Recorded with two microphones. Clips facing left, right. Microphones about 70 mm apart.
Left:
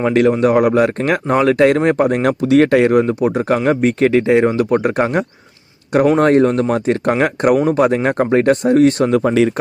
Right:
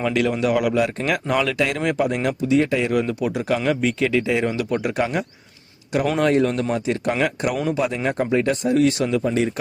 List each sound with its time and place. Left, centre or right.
0.0 s speech: left
2.4 s speech: left
3.0 s speech: left